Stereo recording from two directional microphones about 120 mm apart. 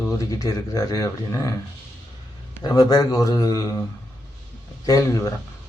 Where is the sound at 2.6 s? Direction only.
30° left (ahead or behind).